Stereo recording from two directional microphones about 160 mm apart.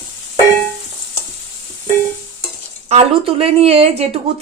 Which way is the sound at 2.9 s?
40° right (ahead or behind).